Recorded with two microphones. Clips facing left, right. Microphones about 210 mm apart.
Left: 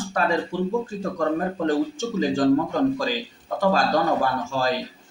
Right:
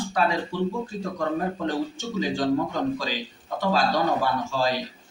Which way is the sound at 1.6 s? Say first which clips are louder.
Left 5 dB; 45° left (ahead or behind).